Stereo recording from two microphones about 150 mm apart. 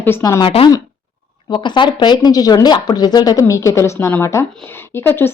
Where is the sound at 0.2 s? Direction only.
25° left (ahead or behind).